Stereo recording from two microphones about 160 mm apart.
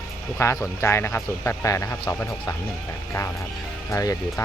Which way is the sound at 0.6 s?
15° left (ahead or behind).